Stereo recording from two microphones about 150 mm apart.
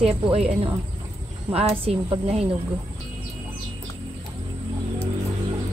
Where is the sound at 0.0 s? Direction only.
45° right (ahead or behind).